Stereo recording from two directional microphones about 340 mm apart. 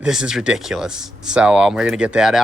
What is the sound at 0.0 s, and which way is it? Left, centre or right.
Speech, centre.